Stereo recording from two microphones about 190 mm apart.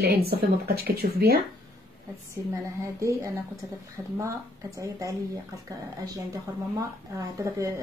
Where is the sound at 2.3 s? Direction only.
15° right (ahead or behind).